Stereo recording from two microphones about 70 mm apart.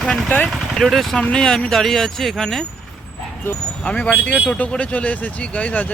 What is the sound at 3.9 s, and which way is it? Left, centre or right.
Speech, centre.